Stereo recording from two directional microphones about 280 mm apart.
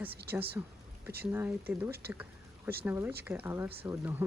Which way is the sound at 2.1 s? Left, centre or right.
Centre.